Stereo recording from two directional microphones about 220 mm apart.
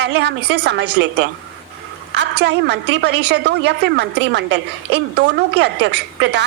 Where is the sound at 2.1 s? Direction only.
50° right (ahead or behind).